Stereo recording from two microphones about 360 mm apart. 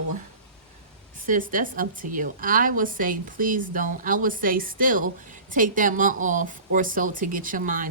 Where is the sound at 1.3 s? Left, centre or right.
Right.